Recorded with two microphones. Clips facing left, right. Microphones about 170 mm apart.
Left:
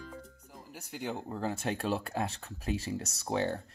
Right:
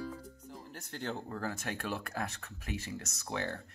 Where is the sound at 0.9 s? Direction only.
10° left (ahead or behind).